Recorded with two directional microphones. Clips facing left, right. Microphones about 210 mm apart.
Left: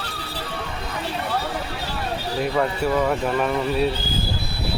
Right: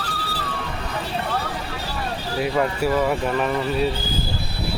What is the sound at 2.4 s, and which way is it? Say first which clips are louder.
Speech: right 1 dB; 5° right (ahead or behind).